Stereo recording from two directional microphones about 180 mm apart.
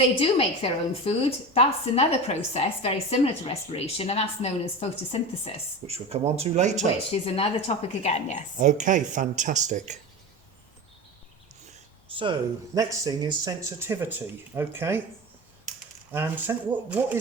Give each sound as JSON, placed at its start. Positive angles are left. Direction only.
{"t": 0.2, "sound": "a woman's voice", "side_deg": 30}
{"t": 5.9, "sound": "speech", "side_deg": -35}
{"t": 7.1, "sound": "a woman's voice", "side_deg": 35}
{"t": 8.5, "sound": "speech", "side_deg": -45}
{"t": 12.1, "sound": "speech", "side_deg": -25}
{"t": 16.1, "sound": "speech", "side_deg": -10}